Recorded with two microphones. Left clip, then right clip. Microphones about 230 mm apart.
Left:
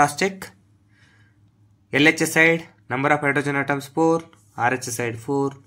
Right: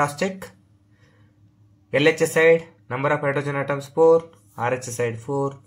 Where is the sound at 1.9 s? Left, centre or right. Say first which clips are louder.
Left 1 dB; left.